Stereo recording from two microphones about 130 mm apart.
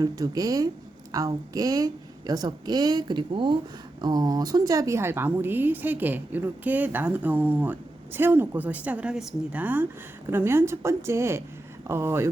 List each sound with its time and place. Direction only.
0.0 s a woman's voice: 30° right (ahead or behind)